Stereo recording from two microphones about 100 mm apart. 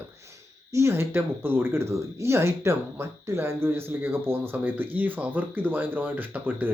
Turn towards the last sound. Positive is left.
turn(degrees=-20)  # may be behind; listen again after turning